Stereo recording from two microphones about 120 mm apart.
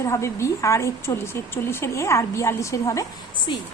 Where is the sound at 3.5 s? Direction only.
40° left (ahead or behind).